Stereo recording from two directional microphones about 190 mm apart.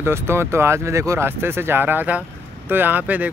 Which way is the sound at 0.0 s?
15° right (ahead or behind).